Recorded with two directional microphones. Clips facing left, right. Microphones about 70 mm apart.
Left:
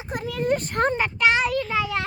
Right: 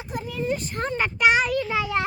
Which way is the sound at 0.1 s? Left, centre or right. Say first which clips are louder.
Left 2 dB; left.